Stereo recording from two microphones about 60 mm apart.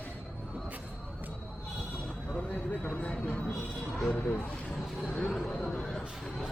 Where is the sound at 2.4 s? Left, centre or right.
Left.